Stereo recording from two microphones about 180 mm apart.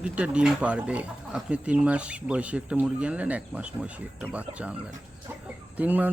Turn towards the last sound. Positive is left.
turn(degrees=-10)  # may be behind; listen again after turning